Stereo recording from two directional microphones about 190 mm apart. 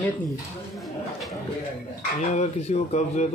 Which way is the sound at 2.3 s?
35° left (ahead or behind).